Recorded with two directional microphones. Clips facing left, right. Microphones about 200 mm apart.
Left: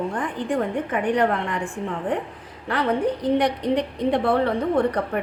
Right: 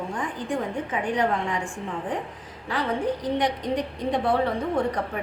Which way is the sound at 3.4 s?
65° left (ahead or behind).